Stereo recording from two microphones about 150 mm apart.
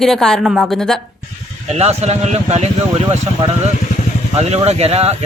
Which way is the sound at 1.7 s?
45° right (ahead or behind).